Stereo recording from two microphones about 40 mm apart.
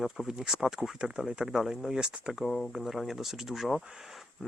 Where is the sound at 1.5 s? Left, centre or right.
Centre.